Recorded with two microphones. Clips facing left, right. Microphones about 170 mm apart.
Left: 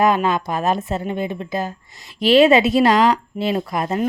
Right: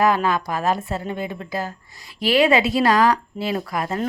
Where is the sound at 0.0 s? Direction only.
20° left (ahead or behind).